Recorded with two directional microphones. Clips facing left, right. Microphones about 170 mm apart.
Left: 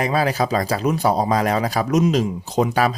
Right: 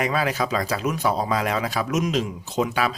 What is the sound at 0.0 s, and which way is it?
Speech, 35° left (ahead or behind).